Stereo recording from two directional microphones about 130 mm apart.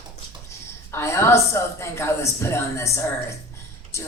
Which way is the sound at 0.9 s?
20° left (ahead or behind).